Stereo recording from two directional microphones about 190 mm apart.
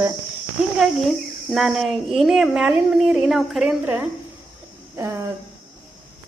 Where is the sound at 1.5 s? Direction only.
Centre (ahead or behind).